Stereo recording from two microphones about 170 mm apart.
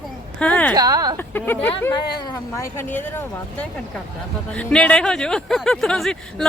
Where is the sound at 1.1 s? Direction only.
10° left (ahead or behind).